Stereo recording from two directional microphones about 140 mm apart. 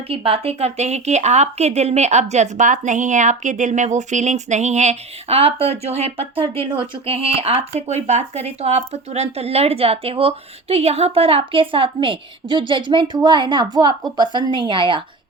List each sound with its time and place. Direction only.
0.1 s a woman's voice: 40° right (ahead or behind)